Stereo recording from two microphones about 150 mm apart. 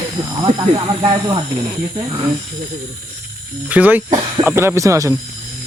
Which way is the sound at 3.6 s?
10° right (ahead or behind).